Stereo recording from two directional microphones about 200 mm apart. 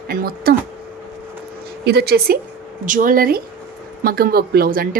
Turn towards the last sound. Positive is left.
turn(degrees=-45)  # may be behind; listen again after turning